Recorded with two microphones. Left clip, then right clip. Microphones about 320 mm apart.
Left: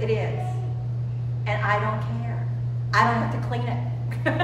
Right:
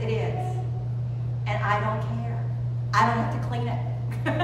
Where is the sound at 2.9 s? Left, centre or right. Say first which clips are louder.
Left 2 dB; centre.